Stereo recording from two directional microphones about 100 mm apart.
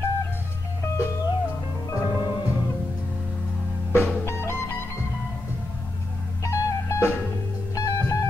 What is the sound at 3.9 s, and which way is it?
Music, 25° left (ahead or behind).